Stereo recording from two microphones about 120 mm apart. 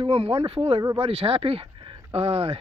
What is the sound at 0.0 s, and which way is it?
Speech, 50° right (ahead or behind).